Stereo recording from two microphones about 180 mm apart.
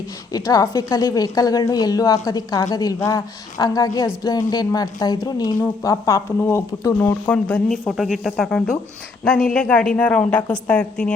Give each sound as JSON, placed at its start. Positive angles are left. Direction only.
{"t": 0.3, "sound": "a woman's voice", "side_deg": 20}